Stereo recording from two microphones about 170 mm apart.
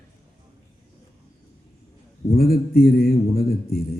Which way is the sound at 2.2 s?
65° left (ahead or behind).